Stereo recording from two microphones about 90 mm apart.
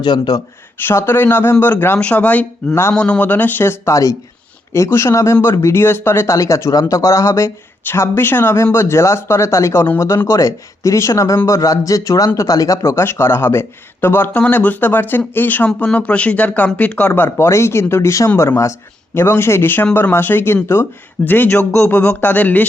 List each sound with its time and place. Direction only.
0.0 s speech: 50° left (ahead or behind)
0.8 s speech: 25° left (ahead or behind)
17.2 s speech: 25° left (ahead or behind)